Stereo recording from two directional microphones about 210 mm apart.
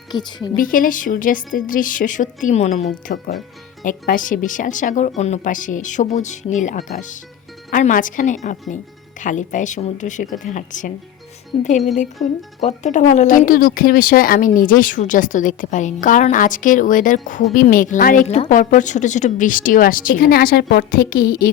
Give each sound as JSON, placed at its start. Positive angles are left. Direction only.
{"t": 0.1, "sound": "a woman's voice", "side_deg": 20}
{"t": 0.5, "sound": "speech", "side_deg": 40}